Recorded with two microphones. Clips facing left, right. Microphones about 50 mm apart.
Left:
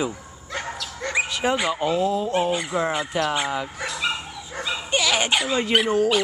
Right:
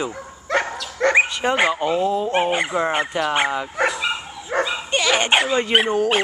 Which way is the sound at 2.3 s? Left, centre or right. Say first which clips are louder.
Right 3 dB; right.